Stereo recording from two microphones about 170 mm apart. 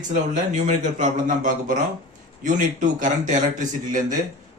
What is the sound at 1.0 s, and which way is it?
Speech, 50° right (ahead or behind).